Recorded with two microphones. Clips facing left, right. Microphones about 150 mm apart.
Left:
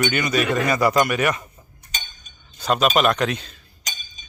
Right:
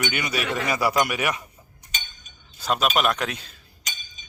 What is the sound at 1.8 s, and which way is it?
Chink, 15° right (ahead or behind).